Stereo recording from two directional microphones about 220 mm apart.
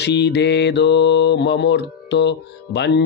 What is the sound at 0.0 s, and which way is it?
Mantra, 50° left (ahead or behind).